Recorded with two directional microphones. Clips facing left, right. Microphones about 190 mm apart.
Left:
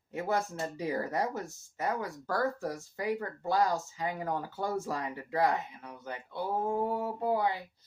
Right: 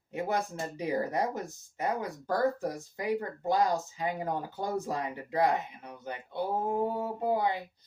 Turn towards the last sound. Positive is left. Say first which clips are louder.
# right 1 dB
turn(degrees=-20)  # may be behind; listen again after turning